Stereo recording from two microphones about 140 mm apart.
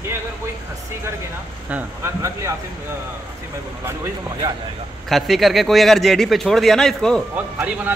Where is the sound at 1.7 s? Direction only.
20° right (ahead or behind).